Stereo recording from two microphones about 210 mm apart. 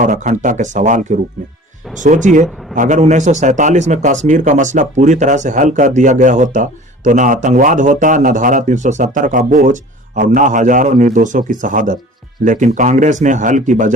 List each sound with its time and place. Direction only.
0.0 s a man's voice: 35° right (ahead or behind)